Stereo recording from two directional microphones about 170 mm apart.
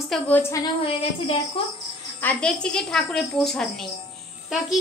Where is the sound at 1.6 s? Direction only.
30° left (ahead or behind).